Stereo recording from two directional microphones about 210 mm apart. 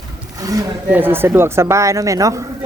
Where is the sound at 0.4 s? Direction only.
15° right (ahead or behind).